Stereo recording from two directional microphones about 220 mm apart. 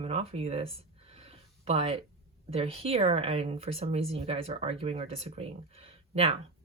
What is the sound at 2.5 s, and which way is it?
Speech, 25° right (ahead or behind).